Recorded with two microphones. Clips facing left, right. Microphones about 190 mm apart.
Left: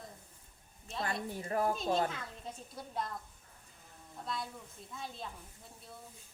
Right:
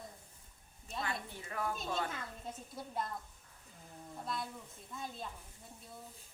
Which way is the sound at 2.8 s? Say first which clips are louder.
Right 1 dB; centre (ahead or behind).